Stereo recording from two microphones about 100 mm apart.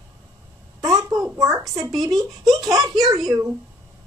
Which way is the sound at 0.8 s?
35° right (ahead or behind).